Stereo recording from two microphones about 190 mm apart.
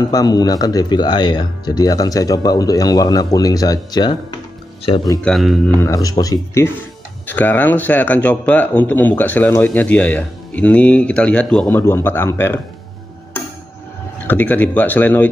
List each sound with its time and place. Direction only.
0.1 s speech: 20° left (ahead or behind)
5.2 s speech: centre (ahead or behind)
5.8 s speech: 15° left (ahead or behind)
14.2 s speech: 10° left (ahead or behind)